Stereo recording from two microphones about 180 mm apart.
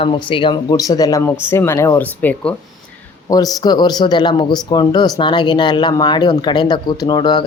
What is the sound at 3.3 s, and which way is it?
Speech, 20° left (ahead or behind).